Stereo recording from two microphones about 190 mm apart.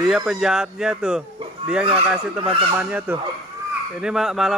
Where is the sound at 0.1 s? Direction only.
Centre (ahead or behind).